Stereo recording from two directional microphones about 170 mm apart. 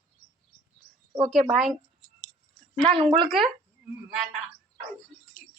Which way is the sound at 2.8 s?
30° right (ahead or behind).